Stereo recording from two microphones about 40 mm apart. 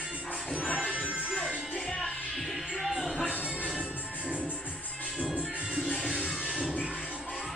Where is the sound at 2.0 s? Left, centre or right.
Centre.